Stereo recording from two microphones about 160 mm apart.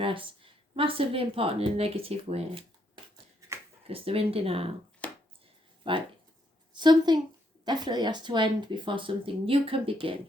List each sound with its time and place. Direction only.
0.0 s a woman's voice: 35° right (ahead or behind)
3.8 s speech: 35° right (ahead or behind)
5.0 s a sound: 10° left (ahead or behind)
5.8 s a woman's voice: 30° right (ahead or behind)